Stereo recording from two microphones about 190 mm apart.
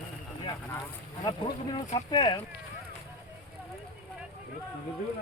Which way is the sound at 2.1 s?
20° left (ahead or behind).